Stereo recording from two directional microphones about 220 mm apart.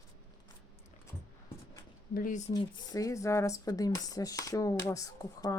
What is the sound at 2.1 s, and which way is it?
Speech, 40° left (ahead or behind).